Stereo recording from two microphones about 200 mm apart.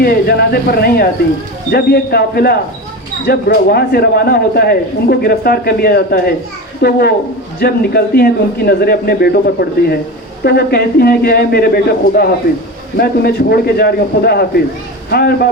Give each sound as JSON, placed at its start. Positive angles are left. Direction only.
{"t": 0.0, "sound": "a man's voice", "side_deg": 50}